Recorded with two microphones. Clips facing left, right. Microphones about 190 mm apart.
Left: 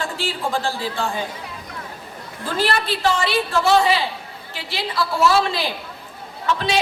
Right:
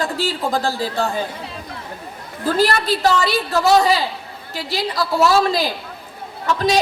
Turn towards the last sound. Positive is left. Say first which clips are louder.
# right 3 dB
turn(degrees=-40)  # may be behind; listen again after turning